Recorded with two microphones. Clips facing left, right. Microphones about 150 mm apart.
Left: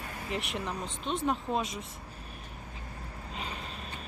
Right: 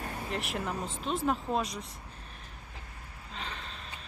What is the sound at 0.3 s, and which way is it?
Speech, centre (ahead or behind).